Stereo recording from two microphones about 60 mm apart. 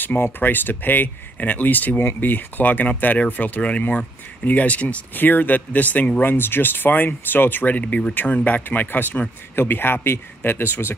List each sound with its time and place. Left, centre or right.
0.0 s speech: left
6.2 s speech: left